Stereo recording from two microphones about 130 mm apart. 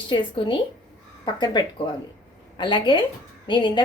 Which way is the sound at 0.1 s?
40° left (ahead or behind).